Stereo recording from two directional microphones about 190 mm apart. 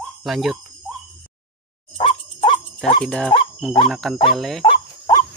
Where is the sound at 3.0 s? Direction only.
5° left (ahead or behind).